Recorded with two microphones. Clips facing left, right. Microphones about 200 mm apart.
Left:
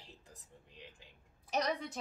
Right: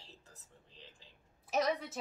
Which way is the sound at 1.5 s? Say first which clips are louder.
Right 2 dB; centre (ahead or behind).